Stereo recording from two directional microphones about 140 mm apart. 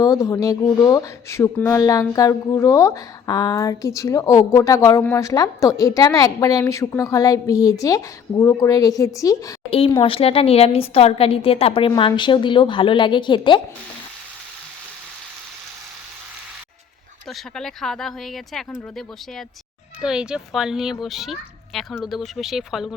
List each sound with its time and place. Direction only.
0.0 s speech: 25° left (ahead or behind)
9.6 s a woman's voice: 40° left (ahead or behind)
17.2 s a child's voice: centre (ahead or behind)